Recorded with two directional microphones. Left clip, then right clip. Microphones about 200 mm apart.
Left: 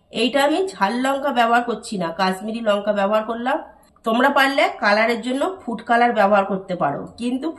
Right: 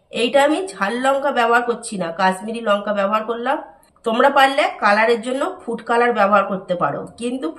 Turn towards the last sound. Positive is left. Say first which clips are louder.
# right 1 dB
turn(degrees=-20)  # may be behind; listen again after turning